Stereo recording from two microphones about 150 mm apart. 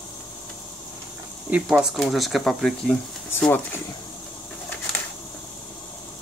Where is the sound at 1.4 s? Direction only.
10° right (ahead or behind); by 3.8 s 15° left (ahead or behind).